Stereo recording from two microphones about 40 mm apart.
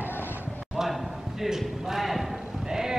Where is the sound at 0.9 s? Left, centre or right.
Centre.